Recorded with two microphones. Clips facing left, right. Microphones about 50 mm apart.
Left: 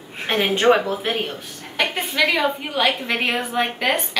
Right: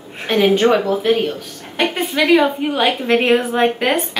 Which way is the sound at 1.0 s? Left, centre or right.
Centre.